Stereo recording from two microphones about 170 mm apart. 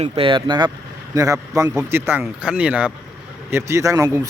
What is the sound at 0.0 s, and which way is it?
Speech, 30° right (ahead or behind).